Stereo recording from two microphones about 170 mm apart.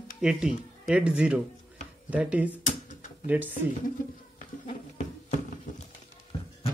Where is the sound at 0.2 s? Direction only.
5° right (ahead or behind).